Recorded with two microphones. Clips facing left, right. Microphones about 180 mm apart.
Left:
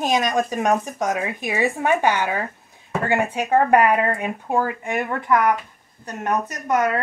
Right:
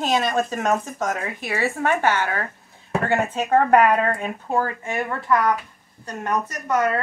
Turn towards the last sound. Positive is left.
turn(degrees=15)  # may be behind; listen again after turning